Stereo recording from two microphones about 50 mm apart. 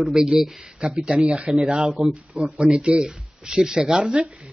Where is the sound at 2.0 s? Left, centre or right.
Centre.